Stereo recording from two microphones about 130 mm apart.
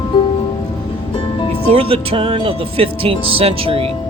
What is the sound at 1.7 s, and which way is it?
Speech, 45° right (ahead or behind).